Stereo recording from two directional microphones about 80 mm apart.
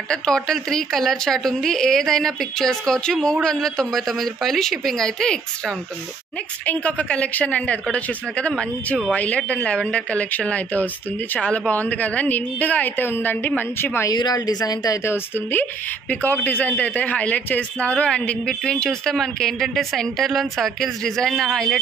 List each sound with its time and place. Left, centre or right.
0.1 s a man's voice: centre; by 14.0 s left
14.1 s speech: left
15.0 s a woman's voice: left; by 21.5 s centre